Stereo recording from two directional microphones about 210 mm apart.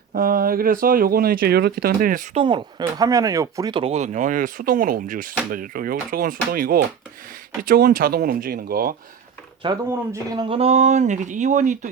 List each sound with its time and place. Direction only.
0.1 s speech: 45° right (ahead or behind)
2.3 s speech: 25° right (ahead or behind); by 9.0 s 45° right (ahead or behind)
9.6 s speech: 20° right (ahead or behind); by 11.9 s 35° right (ahead or behind)